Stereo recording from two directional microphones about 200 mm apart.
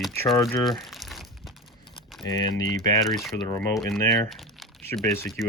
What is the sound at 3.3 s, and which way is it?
Speech, 10° left (ahead or behind).